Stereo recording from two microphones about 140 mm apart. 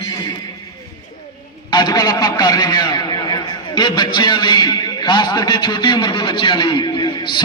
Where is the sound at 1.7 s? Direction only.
30° left (ahead or behind).